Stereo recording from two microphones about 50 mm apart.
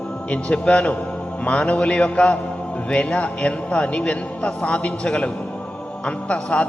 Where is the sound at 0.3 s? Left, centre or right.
Left.